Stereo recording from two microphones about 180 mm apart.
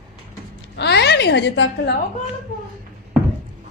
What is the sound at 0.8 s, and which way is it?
A woman's voice, 70° left (ahead or behind).